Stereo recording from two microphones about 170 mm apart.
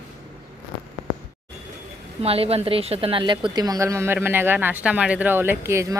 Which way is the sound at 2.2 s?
35° right (ahead or behind).